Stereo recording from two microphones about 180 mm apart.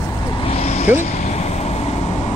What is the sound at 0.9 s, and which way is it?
Vehicle, 40° left (ahead or behind).